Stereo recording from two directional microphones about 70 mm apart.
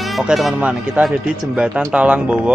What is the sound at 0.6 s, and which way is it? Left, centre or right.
Speech, right.